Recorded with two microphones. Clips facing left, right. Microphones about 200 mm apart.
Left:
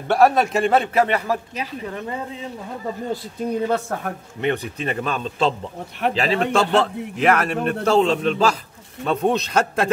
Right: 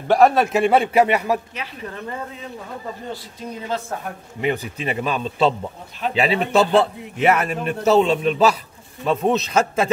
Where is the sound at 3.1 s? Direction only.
55° left (ahead or behind).